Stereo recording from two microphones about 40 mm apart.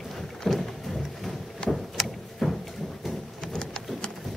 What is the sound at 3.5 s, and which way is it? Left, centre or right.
Rain, centre.